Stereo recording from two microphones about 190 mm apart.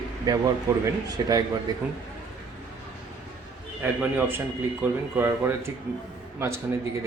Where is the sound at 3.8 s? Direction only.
10° right (ahead or behind).